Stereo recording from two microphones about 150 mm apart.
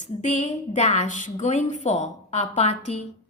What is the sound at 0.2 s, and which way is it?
A woman's voice, 50° left (ahead or behind).